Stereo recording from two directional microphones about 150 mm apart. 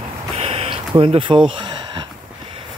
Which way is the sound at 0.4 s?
40° right (ahead or behind).